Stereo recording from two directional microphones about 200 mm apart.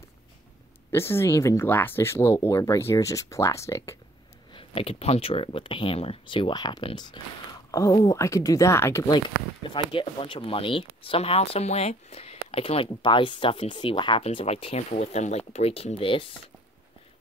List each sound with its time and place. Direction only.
0.9 s speech: 15° left (ahead or behind)
4.6 s speech: 30° left (ahead or behind)